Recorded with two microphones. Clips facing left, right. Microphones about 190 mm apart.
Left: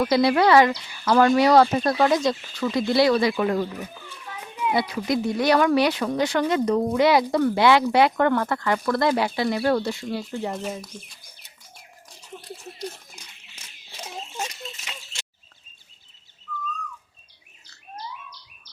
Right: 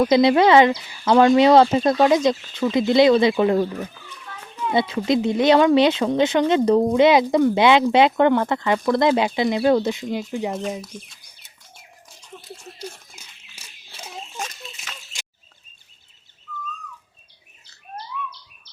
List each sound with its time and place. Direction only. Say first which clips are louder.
0.0 s speech: right 4 dB; 20° right (ahead or behind)
4.4 s children playing: left 1 dB; 10° left (ahead or behind)
4.7 s speech: right 4 dB; 25° right (ahead or behind)
12.4 s a sound: left 1 dB; 5° right (ahead or behind)